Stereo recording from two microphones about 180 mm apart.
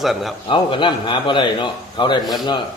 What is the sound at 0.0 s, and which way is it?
Speech, centre (ahead or behind).